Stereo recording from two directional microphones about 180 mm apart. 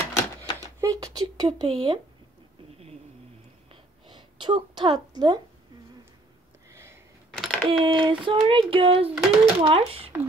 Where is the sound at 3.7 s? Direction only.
25° right (ahead or behind).